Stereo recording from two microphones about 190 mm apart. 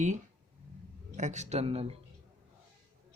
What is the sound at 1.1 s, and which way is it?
Speech, 40° right (ahead or behind).